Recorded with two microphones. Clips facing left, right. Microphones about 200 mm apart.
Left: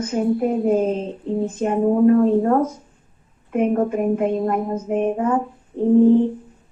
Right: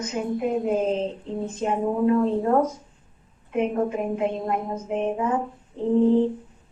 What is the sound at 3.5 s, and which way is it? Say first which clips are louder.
A woman's voice: left 5 dB; 50° left (ahead or behind).